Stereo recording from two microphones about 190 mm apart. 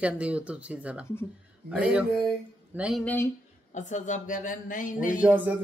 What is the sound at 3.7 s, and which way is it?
Speech, 40° left (ahead or behind).